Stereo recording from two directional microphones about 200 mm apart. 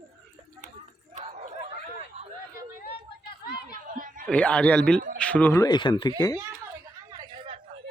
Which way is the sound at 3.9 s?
45° right (ahead or behind).